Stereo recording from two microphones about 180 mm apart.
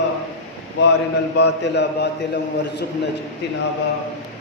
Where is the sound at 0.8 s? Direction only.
70° left (ahead or behind).